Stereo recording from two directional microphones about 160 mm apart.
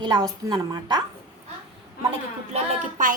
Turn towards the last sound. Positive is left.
turn(degrees=-45)  # may be behind; listen again after turning